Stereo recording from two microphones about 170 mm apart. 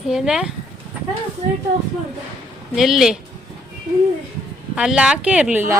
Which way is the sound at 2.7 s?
Centre (ahead or behind).